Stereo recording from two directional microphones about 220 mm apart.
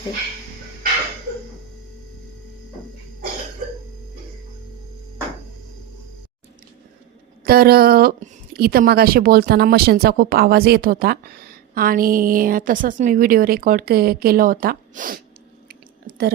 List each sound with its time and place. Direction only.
7.4 s a woman's voice: 45° right (ahead or behind)
15.7 s chewing: 45° right (ahead or behind)